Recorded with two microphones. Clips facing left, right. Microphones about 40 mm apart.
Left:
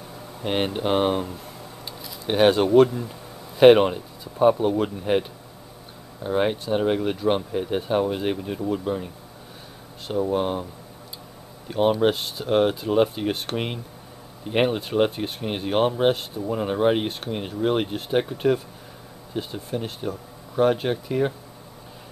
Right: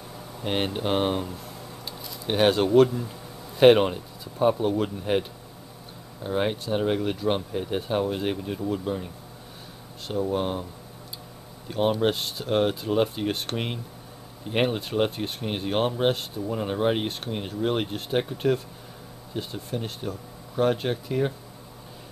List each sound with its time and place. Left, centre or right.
0.4 s speech: centre
6.2 s speech: centre
10.2 s speech: centre